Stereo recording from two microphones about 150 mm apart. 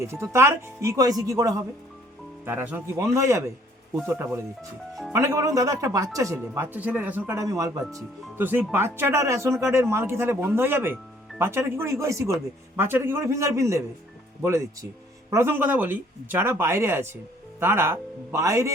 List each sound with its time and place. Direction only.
0.0 s speech: 15° right (ahead or behind)